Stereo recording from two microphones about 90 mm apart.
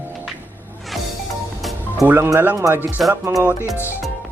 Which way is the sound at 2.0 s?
20° right (ahead or behind).